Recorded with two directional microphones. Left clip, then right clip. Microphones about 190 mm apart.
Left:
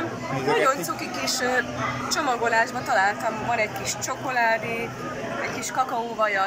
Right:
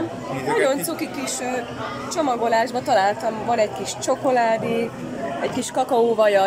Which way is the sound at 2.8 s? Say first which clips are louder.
Right 3 dB; 25° right (ahead or behind).